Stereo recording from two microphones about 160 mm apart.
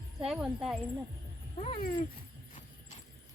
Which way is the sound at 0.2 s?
5° right (ahead or behind).